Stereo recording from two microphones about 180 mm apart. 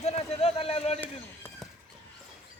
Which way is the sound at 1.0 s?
10° left (ahead or behind).